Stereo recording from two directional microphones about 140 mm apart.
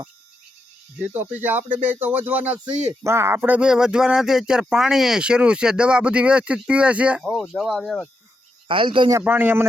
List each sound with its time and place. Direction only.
1.1 s speech: 15° right (ahead or behind); by 8.1 s 5° left (ahead or behind)
8.6 s speech: 35° right (ahead or behind)
9.2 s speech: 15° right (ahead or behind)